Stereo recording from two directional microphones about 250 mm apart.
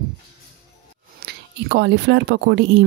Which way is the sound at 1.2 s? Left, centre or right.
Right.